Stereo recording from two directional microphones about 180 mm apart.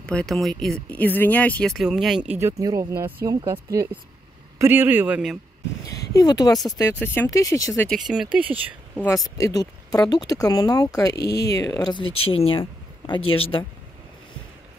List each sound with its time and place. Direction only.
0.0 s speech: 5° left (ahead or behind)
2.3 s speech: 15° right (ahead or behind)
5.9 s speech: 20° left (ahead or behind)
7.9 s speech: 5° right (ahead or behind)
9.4 s speech: 20° left (ahead or behind)